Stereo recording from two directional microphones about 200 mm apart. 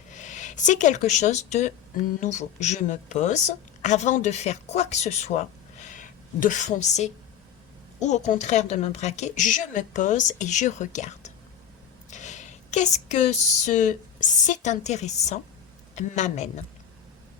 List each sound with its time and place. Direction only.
0.1 s a woman's voice: 40° left (ahead or behind)
12.1 s a woman's voice: 35° left (ahead or behind)